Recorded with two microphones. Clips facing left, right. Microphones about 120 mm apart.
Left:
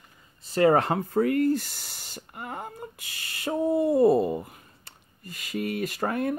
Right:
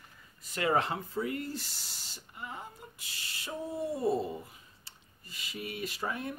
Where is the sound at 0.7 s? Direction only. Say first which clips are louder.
Left 7 dB; 50° left (ahead or behind).